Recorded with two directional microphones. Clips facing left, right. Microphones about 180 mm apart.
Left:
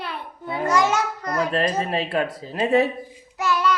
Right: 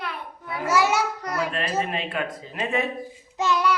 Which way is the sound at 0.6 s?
5° right (ahead or behind).